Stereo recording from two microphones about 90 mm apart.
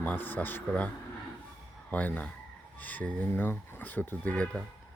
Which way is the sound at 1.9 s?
15° left (ahead or behind).